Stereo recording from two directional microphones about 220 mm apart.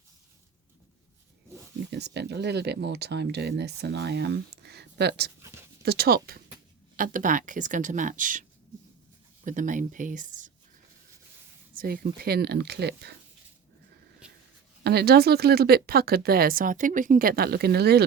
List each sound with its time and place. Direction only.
1.9 s speech: 50° right (ahead or behind)
11.7 s speech: 40° right (ahead or behind)
14.8 s speech: 45° right (ahead or behind)